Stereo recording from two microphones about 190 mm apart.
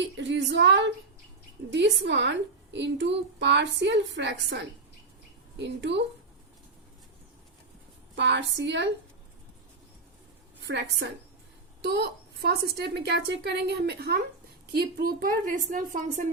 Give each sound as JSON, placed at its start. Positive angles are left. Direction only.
{"t": 0.0, "sound": "a woman's voice", "side_deg": -70}
{"t": 8.1, "sound": "a woman's voice", "side_deg": -65}
{"t": 10.7, "sound": "a woman's voice", "side_deg": -65}